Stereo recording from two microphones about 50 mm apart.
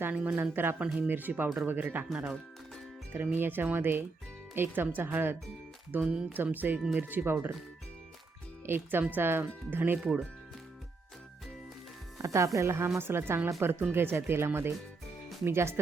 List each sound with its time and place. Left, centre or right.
0.1 s speech: right
0.5 s speech: right
2.1 s speech: centre
3.3 s speech: right
6.0 s speech: centre
6.3 s speech: right
6.7 s speech: centre
7.1 s speech: right
8.6 s speech: right
10.0 s speech: centre
12.2 s speech: right
12.5 s a woman's voice: right
13.0 s speech: right